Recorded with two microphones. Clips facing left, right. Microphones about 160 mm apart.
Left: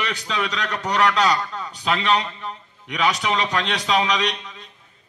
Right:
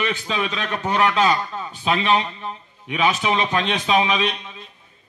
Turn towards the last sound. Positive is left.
turn(degrees=-20)  # may be behind; listen again after turning